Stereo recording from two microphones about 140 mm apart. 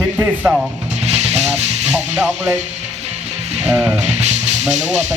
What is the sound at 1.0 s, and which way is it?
Music, 50° right (ahead or behind).